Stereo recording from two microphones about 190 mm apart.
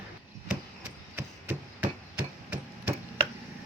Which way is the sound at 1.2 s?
10° right (ahead or behind).